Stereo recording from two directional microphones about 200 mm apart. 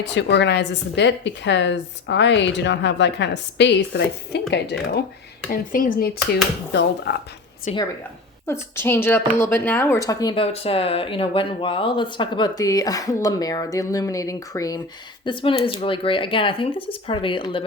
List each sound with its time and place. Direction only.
0.0 s a woman's voice: 60° left (ahead or behind)
6.7 s a woman's voice: 60° left (ahead or behind)
7.7 s speech: 35° left (ahead or behind)
8.4 s speech: 10° left (ahead or behind)